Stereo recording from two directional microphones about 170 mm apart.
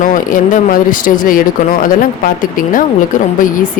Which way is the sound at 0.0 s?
50° left (ahead or behind).